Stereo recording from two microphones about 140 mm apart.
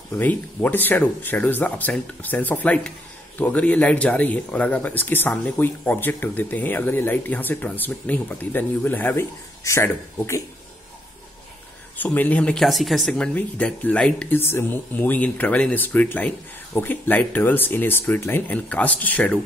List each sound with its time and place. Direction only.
0.2 s a man's voice: 10° left (ahead or behind)
12.0 s speech: 10° left (ahead or behind)